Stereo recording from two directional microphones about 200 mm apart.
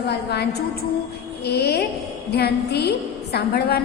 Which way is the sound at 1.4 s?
55° left (ahead or behind).